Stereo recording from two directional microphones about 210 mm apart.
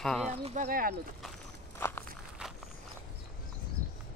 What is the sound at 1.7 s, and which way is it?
Walk, 10° left (ahead or behind).